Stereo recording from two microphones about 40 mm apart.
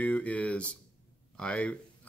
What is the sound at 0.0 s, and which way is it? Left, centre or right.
Speech, left.